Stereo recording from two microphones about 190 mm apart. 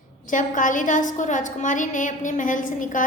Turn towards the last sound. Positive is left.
turn(degrees=45)  # may be behind; listen again after turning